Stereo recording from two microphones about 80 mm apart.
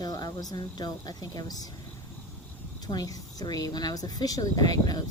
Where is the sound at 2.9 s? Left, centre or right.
Left.